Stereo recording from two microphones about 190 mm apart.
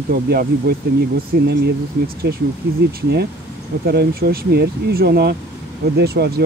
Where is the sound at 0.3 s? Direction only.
50° right (ahead or behind).